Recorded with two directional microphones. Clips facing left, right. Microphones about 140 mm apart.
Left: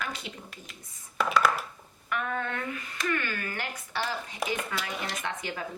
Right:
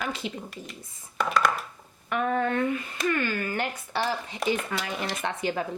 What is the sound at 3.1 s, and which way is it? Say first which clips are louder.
Speech: right 5 dB; 30° right (ahead or behind).